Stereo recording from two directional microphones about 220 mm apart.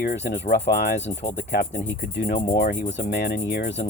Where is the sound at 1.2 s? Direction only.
25° left (ahead or behind).